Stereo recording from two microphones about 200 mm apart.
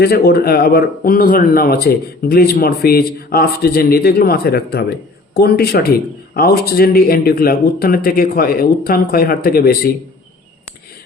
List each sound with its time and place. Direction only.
0.0 s speech: 50° left (ahead or behind)